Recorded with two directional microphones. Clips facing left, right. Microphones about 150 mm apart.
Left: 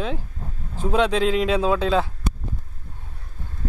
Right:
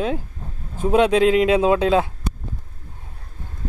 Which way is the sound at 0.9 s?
5° right (ahead or behind).